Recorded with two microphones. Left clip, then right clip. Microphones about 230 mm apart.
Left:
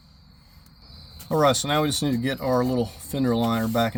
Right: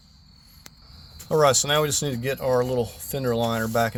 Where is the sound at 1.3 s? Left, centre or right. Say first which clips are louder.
Right 2 dB; right.